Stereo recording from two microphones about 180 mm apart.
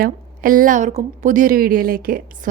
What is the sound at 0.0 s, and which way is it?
A woman's voice, 50° right (ahead or behind).